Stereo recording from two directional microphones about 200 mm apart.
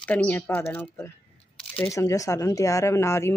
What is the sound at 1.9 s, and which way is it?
Speech, 15° left (ahead or behind).